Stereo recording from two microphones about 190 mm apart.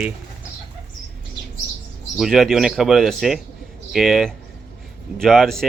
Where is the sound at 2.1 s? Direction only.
Centre (ahead or behind).